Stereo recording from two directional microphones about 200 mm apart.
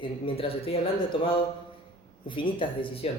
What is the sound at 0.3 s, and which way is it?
Speech, 30° left (ahead or behind).